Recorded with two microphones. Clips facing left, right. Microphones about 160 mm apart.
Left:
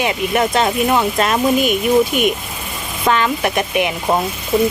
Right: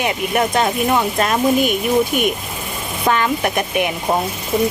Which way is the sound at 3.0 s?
45° right (ahead or behind).